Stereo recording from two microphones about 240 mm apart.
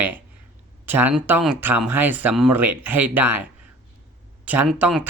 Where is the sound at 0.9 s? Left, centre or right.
Centre.